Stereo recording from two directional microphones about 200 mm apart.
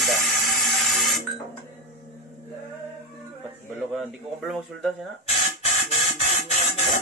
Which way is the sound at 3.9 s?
Centre (ahead or behind).